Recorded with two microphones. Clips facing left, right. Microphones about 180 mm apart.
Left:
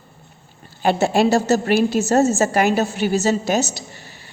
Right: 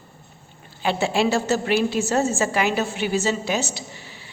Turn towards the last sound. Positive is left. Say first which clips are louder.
# left 5 dB
turn(degrees=40)  # may be behind; listen again after turning